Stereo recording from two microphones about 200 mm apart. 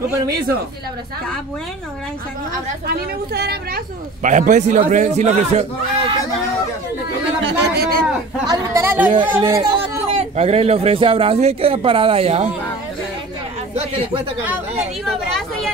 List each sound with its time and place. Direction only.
2.9 s a woman's voice: 50° right (ahead or behind)
4.2 s a man's voice: 40° right (ahead or behind)
7.4 s a woman's voice: 55° right (ahead or behind)
8.5 s a woman's voice: 15° right (ahead or behind)
9.4 s speech: 20° right (ahead or behind)